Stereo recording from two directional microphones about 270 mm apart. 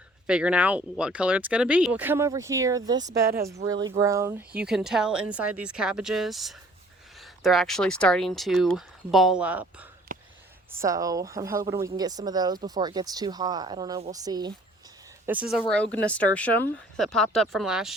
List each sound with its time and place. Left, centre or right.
0.3 s speech: centre
10.1 s whispering: right
10.7 s speech: centre